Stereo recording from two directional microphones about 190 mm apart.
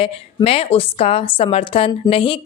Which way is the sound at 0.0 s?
30° left (ahead or behind).